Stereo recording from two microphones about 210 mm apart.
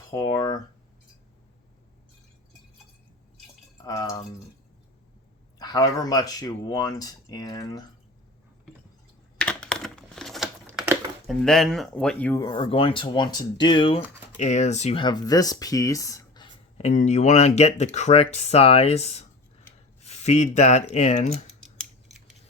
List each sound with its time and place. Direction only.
0.1 s speech: 20° left (ahead or behind)
3.8 s speech: 15° left (ahead or behind)
5.5 s speech: 15° left (ahead or behind)
9.4 s computer keyboard: 5° left (ahead or behind)
10.7 s a sound: 10° right (ahead or behind)
11.3 s speech: centre (ahead or behind)
12.4 s speech: 20° left (ahead or behind)